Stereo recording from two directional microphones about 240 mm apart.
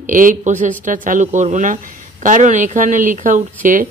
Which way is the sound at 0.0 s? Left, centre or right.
Right.